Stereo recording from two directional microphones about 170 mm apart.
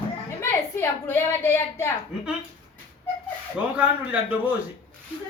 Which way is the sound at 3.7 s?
10° right (ahead or behind).